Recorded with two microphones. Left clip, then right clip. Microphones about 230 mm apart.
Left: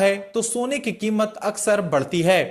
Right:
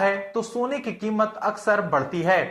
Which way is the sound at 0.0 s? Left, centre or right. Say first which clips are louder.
Left 3 dB; left.